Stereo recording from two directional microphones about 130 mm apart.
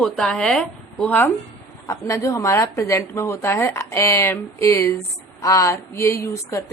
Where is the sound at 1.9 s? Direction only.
25° left (ahead or behind).